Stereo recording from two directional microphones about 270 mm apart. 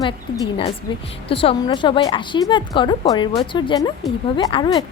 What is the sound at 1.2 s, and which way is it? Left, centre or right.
A woman's voice, centre.